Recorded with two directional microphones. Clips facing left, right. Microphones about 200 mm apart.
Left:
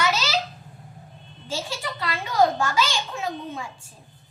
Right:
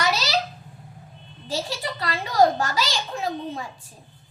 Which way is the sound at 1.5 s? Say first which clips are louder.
Right 2 dB; 35° right (ahead or behind).